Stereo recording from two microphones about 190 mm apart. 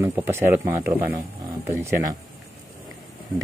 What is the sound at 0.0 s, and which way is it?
Speech, 15° right (ahead or behind).